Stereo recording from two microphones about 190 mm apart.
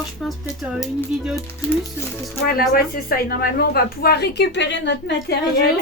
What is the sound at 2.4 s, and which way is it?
A woman's voice, 50° left (ahead or behind).